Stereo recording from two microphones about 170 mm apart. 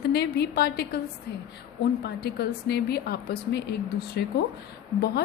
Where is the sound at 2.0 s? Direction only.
70° left (ahead or behind).